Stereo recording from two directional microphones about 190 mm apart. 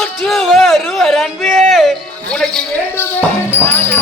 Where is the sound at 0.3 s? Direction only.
Centre (ahead or behind).